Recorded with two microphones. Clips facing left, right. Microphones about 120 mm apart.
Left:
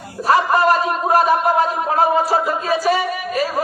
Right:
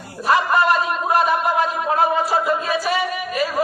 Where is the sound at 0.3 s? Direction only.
40° left (ahead or behind).